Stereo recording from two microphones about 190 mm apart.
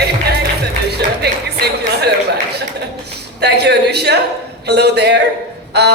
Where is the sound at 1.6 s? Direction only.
60° right (ahead or behind).